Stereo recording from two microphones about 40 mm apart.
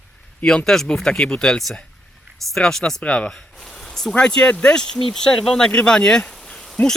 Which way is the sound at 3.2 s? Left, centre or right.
Centre.